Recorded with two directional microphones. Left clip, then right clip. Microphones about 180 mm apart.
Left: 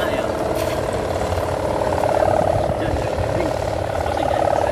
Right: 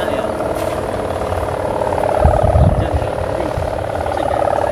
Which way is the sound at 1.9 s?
Centre (ahead or behind).